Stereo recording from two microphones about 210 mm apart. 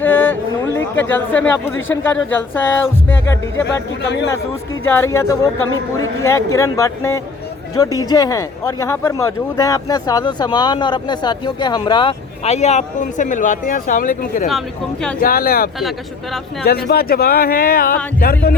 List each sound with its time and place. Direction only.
0.0 s music: 10° left (ahead or behind)
1.1 s speech: 10° left (ahead or behind)
4.9 s speech: 10° left (ahead or behind); by 18.5 s 45° left (ahead or behind)